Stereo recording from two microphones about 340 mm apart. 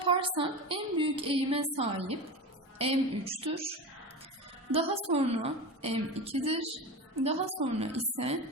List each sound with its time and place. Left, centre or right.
0.0 s a woman's voice: centre
4.7 s a woman's voice: centre